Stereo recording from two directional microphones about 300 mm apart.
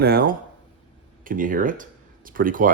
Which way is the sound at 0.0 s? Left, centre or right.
Right.